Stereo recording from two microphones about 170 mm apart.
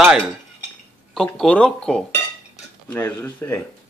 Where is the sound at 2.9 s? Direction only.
15° left (ahead or behind).